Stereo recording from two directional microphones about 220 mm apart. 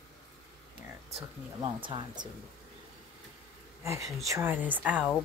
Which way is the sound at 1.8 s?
20° right (ahead or behind).